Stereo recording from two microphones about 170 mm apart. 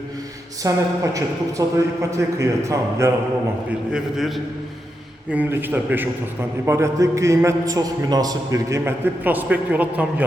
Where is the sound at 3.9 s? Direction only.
Centre (ahead or behind).